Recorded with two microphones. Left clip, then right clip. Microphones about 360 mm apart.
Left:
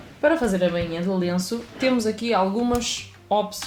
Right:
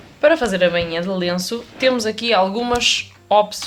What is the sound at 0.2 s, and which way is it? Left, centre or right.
Speech, right.